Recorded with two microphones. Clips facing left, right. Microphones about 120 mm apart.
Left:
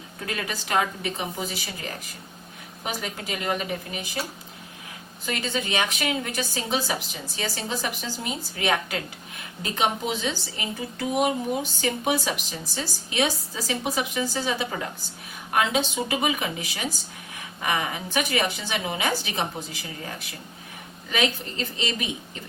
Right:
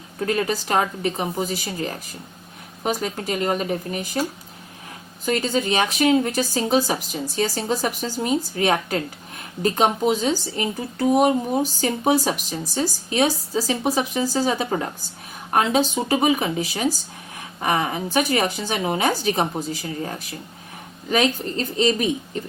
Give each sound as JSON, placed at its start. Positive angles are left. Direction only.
{"t": 0.3, "sound": "speech", "side_deg": -35}
{"t": 5.2, "sound": "speech", "side_deg": -35}